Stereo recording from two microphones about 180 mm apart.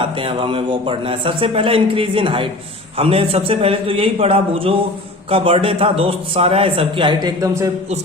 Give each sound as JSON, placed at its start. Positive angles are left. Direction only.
{"t": 0.0, "sound": "a man's voice", "side_deg": -30}